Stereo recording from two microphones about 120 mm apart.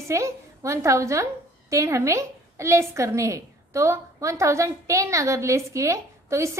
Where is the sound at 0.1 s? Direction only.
25° right (ahead or behind).